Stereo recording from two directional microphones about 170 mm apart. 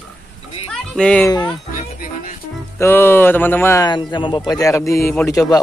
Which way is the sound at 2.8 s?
15° left (ahead or behind).